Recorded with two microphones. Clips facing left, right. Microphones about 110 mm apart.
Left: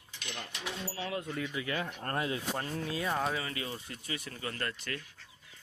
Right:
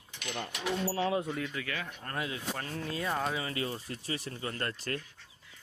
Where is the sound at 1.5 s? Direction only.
25° left (ahead or behind).